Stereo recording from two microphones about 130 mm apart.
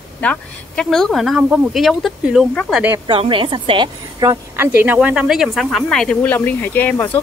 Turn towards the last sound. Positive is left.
turn(degrees=10)  # may be behind; listen again after turning